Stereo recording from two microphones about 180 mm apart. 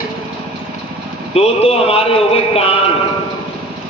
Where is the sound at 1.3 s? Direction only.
35° left (ahead or behind).